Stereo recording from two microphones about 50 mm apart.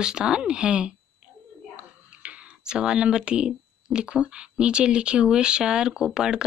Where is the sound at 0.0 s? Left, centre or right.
Centre.